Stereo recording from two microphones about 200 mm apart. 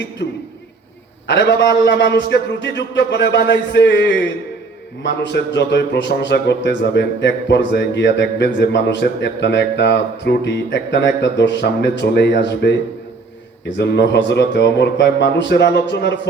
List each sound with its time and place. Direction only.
1.3 s a man's voice: 60° left (ahead or behind)
13.7 s a man's voice: 60° left (ahead or behind)